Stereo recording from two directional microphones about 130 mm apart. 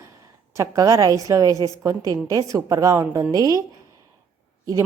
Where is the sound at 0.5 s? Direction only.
25° right (ahead or behind).